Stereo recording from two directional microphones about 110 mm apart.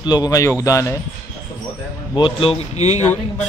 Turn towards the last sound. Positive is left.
turn(degrees=90)